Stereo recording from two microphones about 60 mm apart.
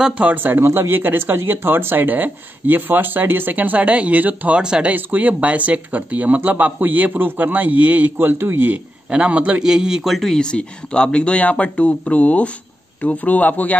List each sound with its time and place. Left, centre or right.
0.2 s speech: right
0.6 s speech: right
4.6 s a man's voice: centre
4.9 s speech: right
9.1 s a man's voice: centre
10.1 s speech: centre; by 13.7 s left